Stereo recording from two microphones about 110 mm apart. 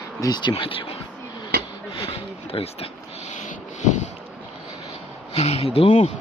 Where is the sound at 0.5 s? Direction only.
55° left (ahead or behind).